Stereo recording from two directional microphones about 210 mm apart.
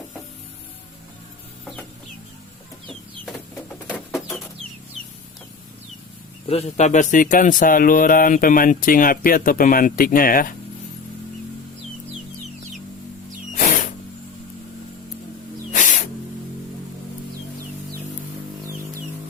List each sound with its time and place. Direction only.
3.8 s bird: centre (ahead or behind)
6.5 s speech: 30° left (ahead or behind)
13.5 s music: 40° left (ahead or behind)
15.7 s spray: 35° left (ahead or behind)